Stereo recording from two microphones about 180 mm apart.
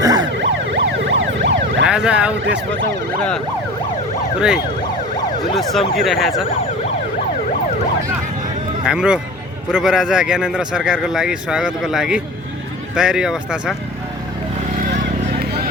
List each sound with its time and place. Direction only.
0.0 s emergency vehicle: 20° right (ahead or behind)
0.4 s emergency vehicle: 90° right
1.9 s a man's voice: 5° right (ahead or behind)
4.4 s a man's voice: 5° right (ahead or behind)
8.8 s a man's voice: 5° right (ahead or behind)